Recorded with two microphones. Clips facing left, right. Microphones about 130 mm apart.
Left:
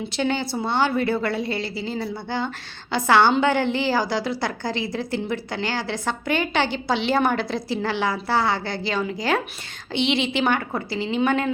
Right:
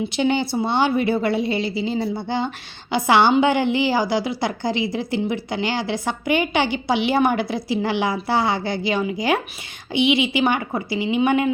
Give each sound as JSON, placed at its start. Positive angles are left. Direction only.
{"t": 0.1, "sound": "a woman's voice", "side_deg": -15}